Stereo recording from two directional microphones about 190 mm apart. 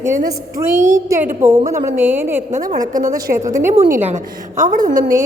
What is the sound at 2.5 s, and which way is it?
Speech, 45° right (ahead or behind).